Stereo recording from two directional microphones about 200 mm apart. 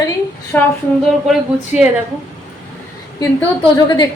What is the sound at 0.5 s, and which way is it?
Speech, 10° left (ahead or behind).